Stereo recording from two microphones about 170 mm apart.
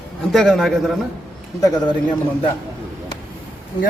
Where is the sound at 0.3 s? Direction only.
5° left (ahead or behind).